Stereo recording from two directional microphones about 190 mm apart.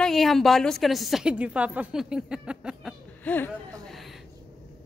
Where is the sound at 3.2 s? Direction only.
10° left (ahead or behind).